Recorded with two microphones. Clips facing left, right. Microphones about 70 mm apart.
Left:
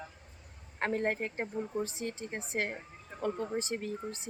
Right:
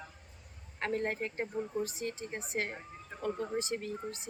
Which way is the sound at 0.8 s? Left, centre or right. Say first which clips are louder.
Left 2 dB; left.